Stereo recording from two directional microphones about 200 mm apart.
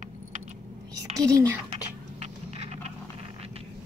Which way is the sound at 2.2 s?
35° right (ahead or behind).